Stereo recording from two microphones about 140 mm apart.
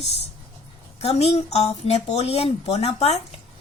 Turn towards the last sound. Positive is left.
turn(degrees=50)  # may be behind; listen again after turning